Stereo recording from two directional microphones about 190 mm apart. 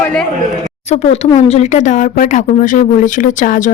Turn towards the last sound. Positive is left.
turn(degrees=40)  # may be behind; listen again after turning